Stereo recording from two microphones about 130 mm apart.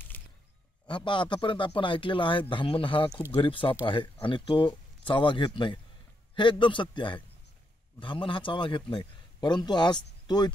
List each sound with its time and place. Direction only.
0.8 s a man's voice: 40° left (ahead or behind)